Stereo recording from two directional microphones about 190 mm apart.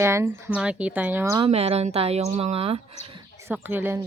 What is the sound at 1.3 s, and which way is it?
Speech, 30° right (ahead or behind).